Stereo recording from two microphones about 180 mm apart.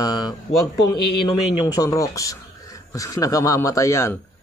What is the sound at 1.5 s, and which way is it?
Speech, 20° left (ahead or behind).